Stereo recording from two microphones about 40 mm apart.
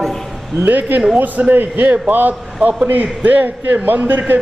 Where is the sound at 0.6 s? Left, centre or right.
Right.